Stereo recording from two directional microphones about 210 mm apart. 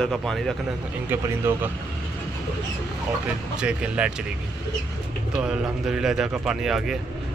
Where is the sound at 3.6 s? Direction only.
5° right (ahead or behind).